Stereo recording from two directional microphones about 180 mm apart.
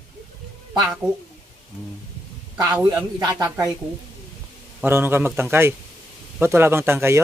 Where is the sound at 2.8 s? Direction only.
20° right (ahead or behind).